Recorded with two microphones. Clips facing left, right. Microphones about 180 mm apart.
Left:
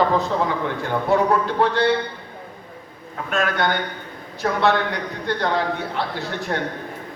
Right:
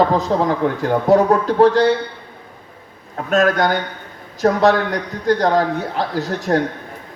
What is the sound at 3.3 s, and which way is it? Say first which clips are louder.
A man's voice: right 6 dB; 40° right (ahead or behind).